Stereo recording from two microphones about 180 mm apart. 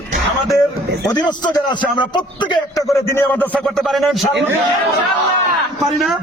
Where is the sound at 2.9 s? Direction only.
15° left (ahead or behind).